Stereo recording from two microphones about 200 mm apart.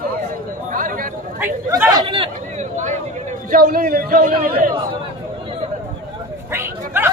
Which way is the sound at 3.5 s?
45° right (ahead or behind).